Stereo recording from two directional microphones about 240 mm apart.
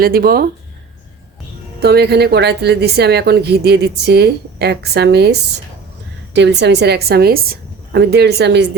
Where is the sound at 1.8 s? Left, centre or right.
Right.